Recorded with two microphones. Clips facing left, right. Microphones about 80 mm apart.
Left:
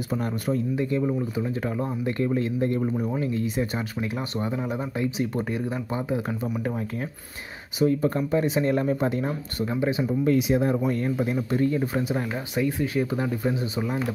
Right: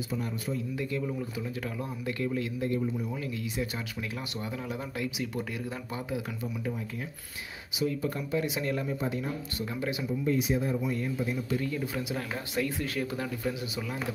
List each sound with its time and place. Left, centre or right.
0.1 s speech: left
0.7 s speech: left
7.8 s speech: left
8.8 s speech: left
9.7 s speech: left
10.2 s speech: left
12.2 s speech: centre